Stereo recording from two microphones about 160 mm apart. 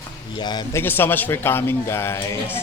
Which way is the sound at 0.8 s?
15° left (ahead or behind).